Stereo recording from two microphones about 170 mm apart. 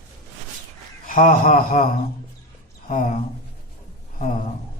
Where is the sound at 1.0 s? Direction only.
55° left (ahead or behind).